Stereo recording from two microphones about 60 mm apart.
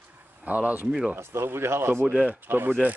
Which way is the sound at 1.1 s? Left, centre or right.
Right.